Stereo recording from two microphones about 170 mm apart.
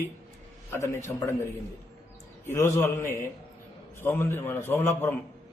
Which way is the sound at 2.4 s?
15° left (ahead or behind).